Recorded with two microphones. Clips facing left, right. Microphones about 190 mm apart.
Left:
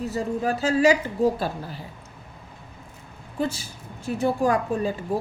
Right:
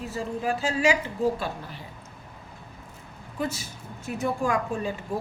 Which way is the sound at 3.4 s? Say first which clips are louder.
Left 3 dB; 30° left (ahead or behind).